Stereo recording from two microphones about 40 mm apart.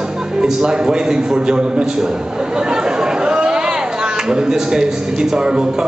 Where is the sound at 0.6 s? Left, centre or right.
Right.